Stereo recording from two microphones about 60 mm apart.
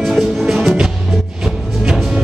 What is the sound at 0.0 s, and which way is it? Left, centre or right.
Music, centre.